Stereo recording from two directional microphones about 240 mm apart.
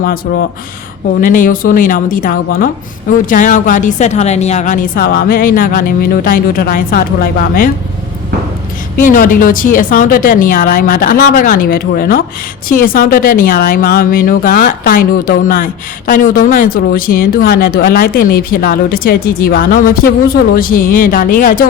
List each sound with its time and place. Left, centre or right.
0.3 s speech: left
9.0 s speech: left